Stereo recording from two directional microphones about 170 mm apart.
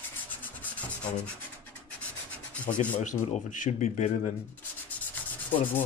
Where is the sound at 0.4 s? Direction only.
10° left (ahead or behind).